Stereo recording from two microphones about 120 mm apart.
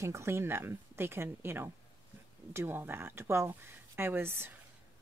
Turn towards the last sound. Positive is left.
turn(degrees=-20)  # may be behind; listen again after turning